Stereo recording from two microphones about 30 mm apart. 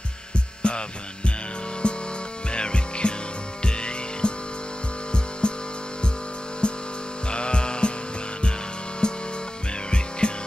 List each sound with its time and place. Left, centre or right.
0.6 s hum: left
1.8 s music: left
5.4 s music: left
6.6 s music: left
7.2 s a sound: left
9.0 s music: left